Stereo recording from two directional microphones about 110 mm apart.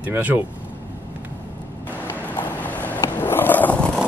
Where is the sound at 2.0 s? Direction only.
15° left (ahead or behind).